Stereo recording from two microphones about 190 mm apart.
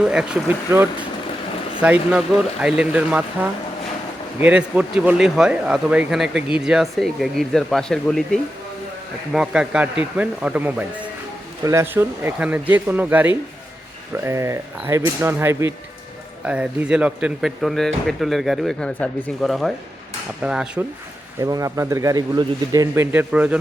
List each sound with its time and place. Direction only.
0.0 s a man's voice: 5° right (ahead or behind)
21.4 s a man's voice: 15° right (ahead or behind)